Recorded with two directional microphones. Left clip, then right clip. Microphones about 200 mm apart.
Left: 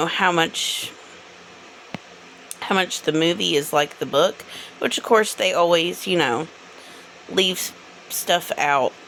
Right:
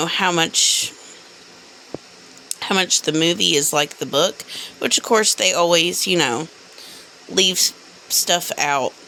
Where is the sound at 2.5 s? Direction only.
25° right (ahead or behind).